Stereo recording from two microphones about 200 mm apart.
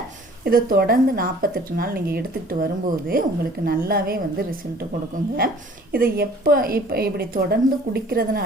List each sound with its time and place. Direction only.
0.4 s a woman's voice: 50° right (ahead or behind)
5.9 s a woman's voice: 45° right (ahead or behind)